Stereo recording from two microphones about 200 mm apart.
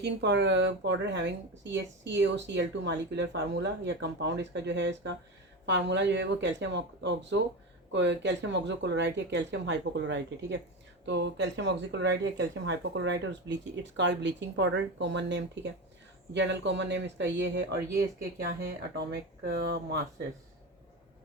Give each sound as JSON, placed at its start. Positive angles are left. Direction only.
{"t": 0.0, "sound": "speech", "side_deg": -60}
{"t": 18.9, "sound": "speech", "side_deg": -55}